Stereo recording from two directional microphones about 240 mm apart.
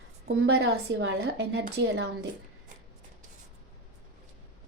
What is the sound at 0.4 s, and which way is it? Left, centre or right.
A woman's voice, right.